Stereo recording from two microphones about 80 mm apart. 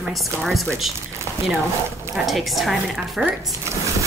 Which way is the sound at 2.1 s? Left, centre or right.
Centre.